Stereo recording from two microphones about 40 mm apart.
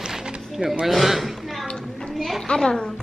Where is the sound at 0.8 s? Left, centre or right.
Centre.